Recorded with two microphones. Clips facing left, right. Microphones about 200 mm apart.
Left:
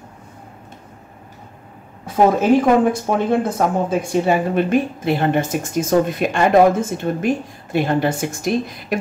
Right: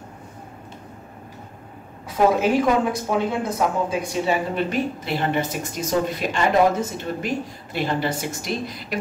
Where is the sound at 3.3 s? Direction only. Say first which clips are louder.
Left 5 dB; 50° left (ahead or behind).